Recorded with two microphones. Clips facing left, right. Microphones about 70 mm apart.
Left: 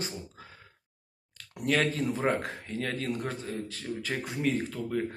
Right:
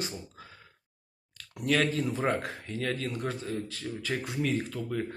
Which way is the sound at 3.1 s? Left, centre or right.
Left.